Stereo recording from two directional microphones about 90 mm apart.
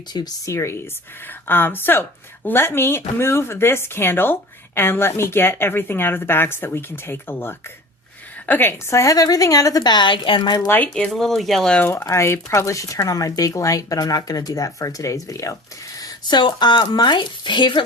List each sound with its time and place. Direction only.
0.4 s speech: 30° left (ahead or behind)
8.9 s a woman's voice: 35° left (ahead or behind); by 10.6 s 65° left (ahead or behind)
10.9 s speech: 5° left (ahead or behind)
11.8 s speech: 25° left (ahead or behind)
16.0 s speech: 50° left (ahead or behind)